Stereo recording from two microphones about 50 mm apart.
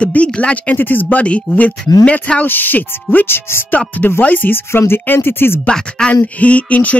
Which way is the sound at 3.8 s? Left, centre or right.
Left.